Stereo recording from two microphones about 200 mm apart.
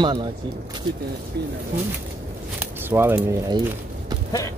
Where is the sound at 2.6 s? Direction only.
10° right (ahead or behind).